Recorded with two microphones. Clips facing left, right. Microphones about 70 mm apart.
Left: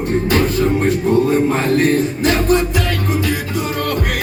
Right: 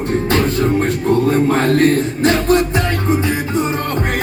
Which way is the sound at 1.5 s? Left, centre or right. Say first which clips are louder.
Right 2 dB; right.